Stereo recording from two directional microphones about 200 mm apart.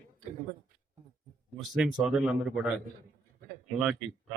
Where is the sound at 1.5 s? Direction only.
5° right (ahead or behind).